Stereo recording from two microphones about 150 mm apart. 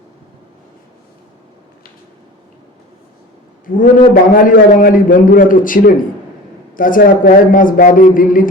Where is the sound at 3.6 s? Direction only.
65° left (ahead or behind).